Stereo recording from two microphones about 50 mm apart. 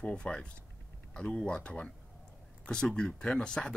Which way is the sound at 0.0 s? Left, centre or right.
Centre.